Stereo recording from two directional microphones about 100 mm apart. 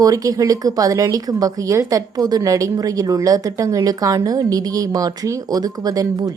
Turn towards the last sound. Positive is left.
turn(degrees=-35)  # may be behind; listen again after turning